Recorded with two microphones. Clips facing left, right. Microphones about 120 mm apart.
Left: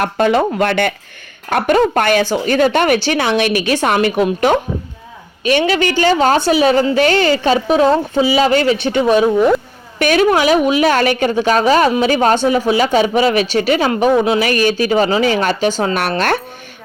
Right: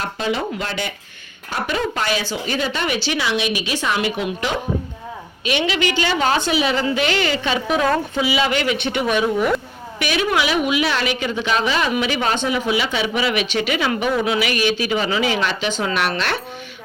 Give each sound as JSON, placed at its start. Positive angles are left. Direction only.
{"t": 0.0, "sound": "a woman's voice", "side_deg": 55}
{"t": 10.0, "sound": "speech", "side_deg": 45}